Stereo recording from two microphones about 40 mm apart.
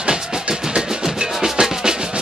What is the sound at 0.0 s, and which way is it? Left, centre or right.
Music, right.